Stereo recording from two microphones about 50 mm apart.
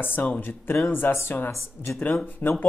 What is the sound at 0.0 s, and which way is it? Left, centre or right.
Speech, left.